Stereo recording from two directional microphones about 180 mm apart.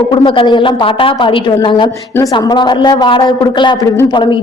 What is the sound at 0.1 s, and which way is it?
A woman's voice, 30° left (ahead or behind).